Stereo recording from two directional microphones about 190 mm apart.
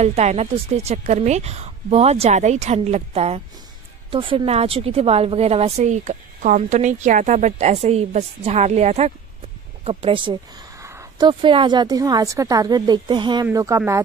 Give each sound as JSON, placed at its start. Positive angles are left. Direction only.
{"t": 0.0, "sound": "a woman's voice", "side_deg": -35}
{"t": 10.8, "sound": "speech", "side_deg": -15}